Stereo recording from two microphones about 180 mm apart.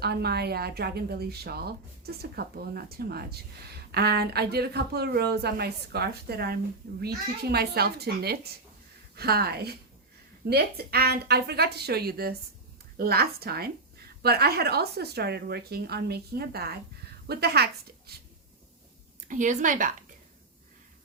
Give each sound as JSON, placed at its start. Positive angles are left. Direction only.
{"t": 0.0, "sound": "a woman's voice", "side_deg": -60}
{"t": 19.3, "sound": "speech", "side_deg": -45}